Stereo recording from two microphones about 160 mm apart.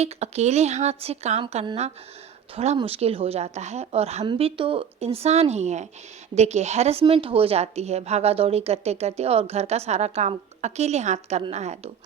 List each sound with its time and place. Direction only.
0.0 s a woman's voice: 40° right (ahead or behind)